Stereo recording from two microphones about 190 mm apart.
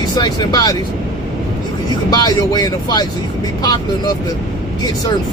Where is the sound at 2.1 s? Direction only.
20° left (ahead or behind).